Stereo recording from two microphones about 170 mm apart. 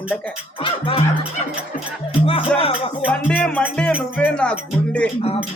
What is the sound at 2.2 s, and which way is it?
Music, 35° left (ahead or behind).